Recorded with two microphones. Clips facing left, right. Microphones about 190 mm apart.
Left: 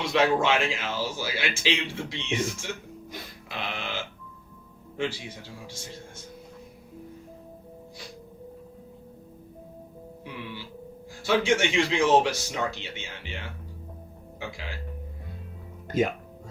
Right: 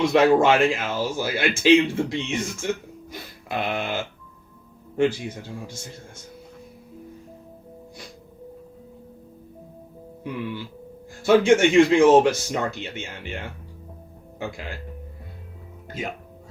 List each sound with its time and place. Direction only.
0.0 s a man's voice: 50° right (ahead or behind)
10.2 s a man's voice: 50° right (ahead or behind)